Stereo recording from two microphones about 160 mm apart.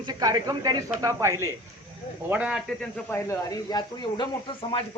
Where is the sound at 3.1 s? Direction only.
20° left (ahead or behind).